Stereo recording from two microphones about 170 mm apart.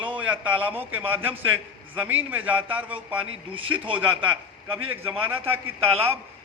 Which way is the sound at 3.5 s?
30° right (ahead or behind).